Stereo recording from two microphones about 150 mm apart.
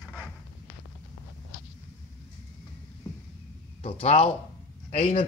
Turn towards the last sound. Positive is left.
turn(degrees=40)  # may be behind; listen again after turning